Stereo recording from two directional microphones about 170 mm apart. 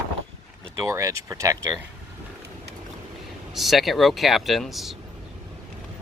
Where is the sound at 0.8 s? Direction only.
20° right (ahead or behind).